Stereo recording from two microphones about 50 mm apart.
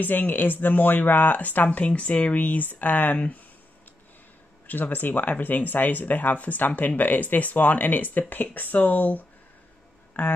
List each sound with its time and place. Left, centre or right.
0.0 s speech: left
4.6 s speech: left
10.1 s a sound: left